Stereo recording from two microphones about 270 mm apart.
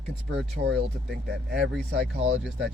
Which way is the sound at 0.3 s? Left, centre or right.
Right.